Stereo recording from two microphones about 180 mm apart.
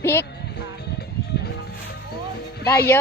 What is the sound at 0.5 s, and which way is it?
Music, 60° left (ahead or behind).